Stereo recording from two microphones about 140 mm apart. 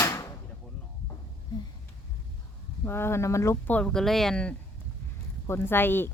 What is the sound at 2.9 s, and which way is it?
Speech, 20° left (ahead or behind).